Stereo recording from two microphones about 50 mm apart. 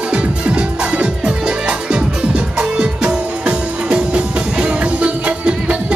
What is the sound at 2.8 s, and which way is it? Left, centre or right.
Music, right.